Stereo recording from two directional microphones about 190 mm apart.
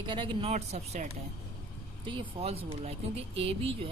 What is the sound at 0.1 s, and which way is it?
Speech, 25° right (ahead or behind).